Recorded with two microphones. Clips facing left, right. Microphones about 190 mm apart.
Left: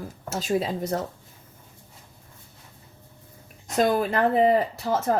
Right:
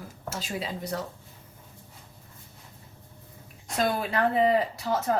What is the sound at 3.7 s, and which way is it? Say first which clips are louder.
Speech: left 5 dB; 40° left (ahead or behind).